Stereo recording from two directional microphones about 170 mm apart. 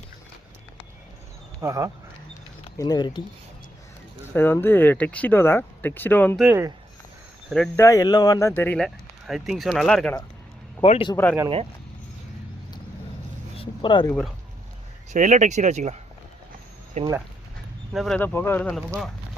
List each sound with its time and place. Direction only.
1.6 s speech: 20° right (ahead or behind)
2.7 s speech: 25° left (ahead or behind)
4.4 s speech: 15° left (ahead or behind)
6.5 s speech: 15° right (ahead or behind)
7.8 s speech: 20° left (ahead or behind)
8.8 s speech: centre (ahead or behind)
10.8 s speech: 35° left (ahead or behind)
11.1 s speech: 15° left (ahead or behind)
13.6 s a sound: 30° left (ahead or behind)
14.1 s speech: 5° left (ahead or behind)
15.1 s speech: 45° right (ahead or behind)
17.9 s speech: centre (ahead or behind)
18.2 s speech: 10° left (ahead or behind)